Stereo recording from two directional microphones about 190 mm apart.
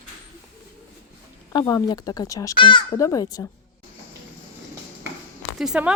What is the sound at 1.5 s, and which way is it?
A child's voice, 20° left (ahead or behind).